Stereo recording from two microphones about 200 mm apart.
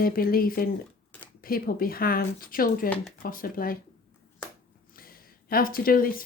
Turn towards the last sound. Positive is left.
turn(degrees=45)  # may be behind; listen again after turning